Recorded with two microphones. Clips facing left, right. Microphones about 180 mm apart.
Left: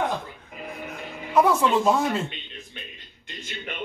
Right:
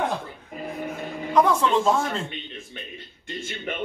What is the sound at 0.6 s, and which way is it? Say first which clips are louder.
Music: right 5 dB; 45° right (ahead or behind).